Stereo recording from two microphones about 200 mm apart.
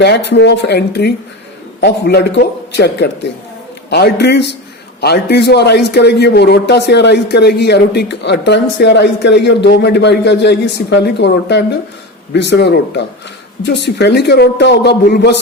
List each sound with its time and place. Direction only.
0.0 s a man's voice: 60° left (ahead or behind)